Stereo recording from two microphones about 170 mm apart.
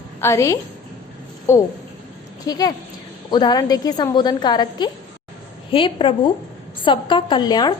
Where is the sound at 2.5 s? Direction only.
20° left (ahead or behind).